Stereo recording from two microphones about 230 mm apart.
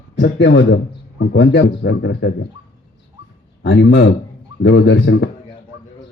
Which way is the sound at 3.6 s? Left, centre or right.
Left.